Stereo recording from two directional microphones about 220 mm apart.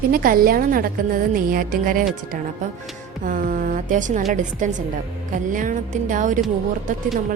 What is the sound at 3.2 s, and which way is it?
A woman's voice, 35° right (ahead or behind).